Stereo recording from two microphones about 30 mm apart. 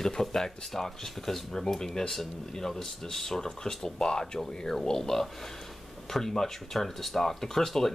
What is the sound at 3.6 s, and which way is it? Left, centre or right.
Speech, left.